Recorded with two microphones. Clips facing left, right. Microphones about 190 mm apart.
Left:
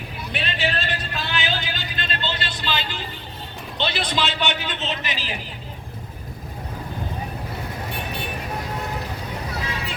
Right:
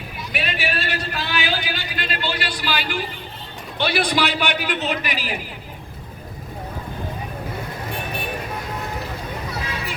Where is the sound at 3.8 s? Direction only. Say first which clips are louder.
Right 4 dB; 20° left (ahead or behind).